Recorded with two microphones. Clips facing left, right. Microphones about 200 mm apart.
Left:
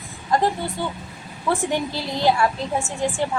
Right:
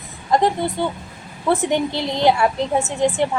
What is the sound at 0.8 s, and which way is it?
A woman's voice, 25° right (ahead or behind).